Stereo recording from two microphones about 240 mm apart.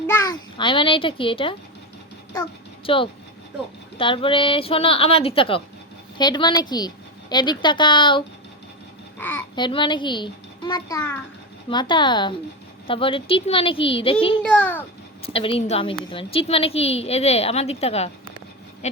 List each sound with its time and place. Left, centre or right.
0.1 s a child's voice: centre
2.8 s a woman's voice: left
9.1 s babbling: centre
9.6 s a woman's voice: centre
14.4 s a child's voice: centre
15.3 s a woman's voice: left